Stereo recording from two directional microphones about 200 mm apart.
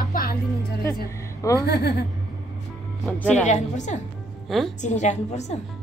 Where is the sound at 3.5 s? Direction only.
35° left (ahead or behind).